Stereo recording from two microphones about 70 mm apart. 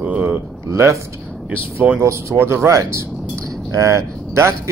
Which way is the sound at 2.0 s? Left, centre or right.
Right.